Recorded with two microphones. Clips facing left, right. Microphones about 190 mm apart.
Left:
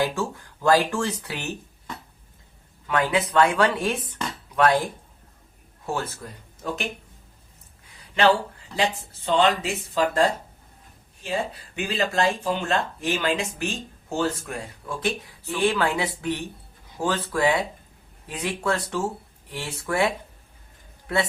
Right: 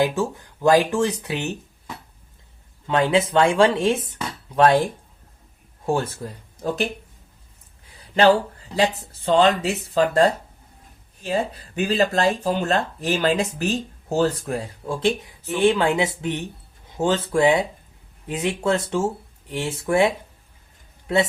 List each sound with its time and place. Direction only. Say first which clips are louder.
0.0 s speech: right 4 dB; 20° right (ahead or behind)
2.8 s speech: right 4 dB; 25° right (ahead or behind)
5.8 s speech: right 6 dB; 30° right (ahead or behind)
7.9 s a sound: right 4 dB; 35° right (ahead or behind)
9.2 s speech: right 4 dB; 40° right (ahead or behind)
11.7 s speech: right 6 dB; 40° right (ahead or behind); by 20.1 s 20° right (ahead or behind)